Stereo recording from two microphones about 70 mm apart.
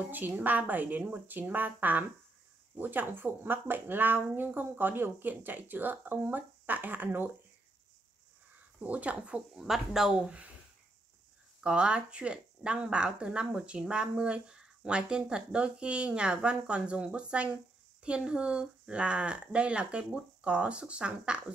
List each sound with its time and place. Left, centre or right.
0.4 s speech: right
8.8 s speech: right
11.6 s speech: centre